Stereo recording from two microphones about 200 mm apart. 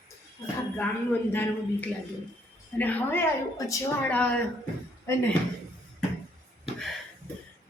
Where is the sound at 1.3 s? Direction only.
10° left (ahead or behind).